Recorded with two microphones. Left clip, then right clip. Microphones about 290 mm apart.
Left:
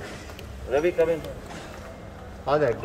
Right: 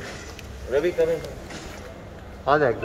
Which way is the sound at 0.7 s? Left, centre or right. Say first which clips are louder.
Even; centre.